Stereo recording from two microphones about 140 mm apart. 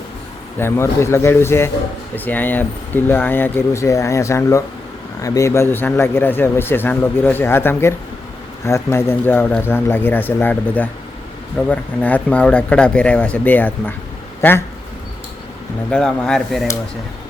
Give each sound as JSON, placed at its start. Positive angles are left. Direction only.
{"t": 0.6, "sound": "a man's voice", "side_deg": 20}
{"t": 15.9, "sound": "speech", "side_deg": 5}